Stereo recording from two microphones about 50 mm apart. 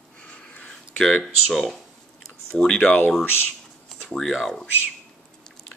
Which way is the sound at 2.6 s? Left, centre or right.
Centre.